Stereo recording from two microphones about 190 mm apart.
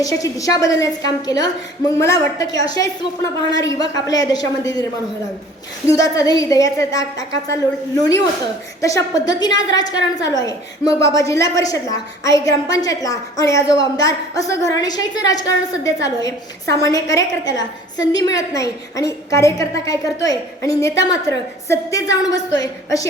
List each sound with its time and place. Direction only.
0.0 s a woman's voice: 15° left (ahead or behind)
5.9 s a woman's voice: 15° left (ahead or behind)
8.8 s a woman's voice: 15° left (ahead or behind)